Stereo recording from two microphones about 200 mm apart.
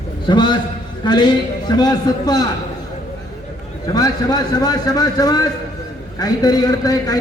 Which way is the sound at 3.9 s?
20° left (ahead or behind).